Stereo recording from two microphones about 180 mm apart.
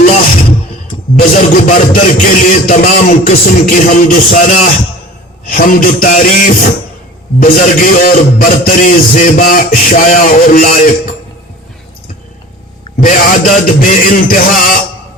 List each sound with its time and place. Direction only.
1.1 s a man's voice: 50° left (ahead or behind)
13.0 s a man's voice: 50° left (ahead or behind)